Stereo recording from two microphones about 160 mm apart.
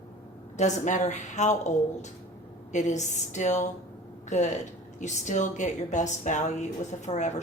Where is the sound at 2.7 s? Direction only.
50° left (ahead or behind).